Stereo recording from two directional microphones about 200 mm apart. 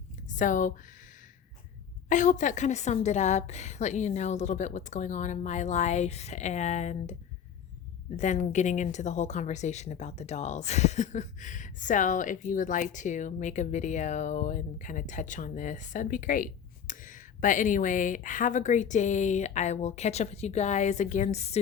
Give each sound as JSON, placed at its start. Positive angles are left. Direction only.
{"t": 0.3, "sound": "speech", "side_deg": 40}
{"t": 2.0, "sound": "speech", "side_deg": 40}